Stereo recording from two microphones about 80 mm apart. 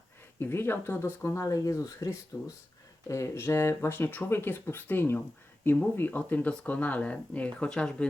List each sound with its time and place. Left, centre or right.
0.3 s speech: left; by 8.0 s centre